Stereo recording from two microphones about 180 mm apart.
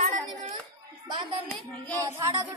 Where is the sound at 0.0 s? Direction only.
45° right (ahead or behind).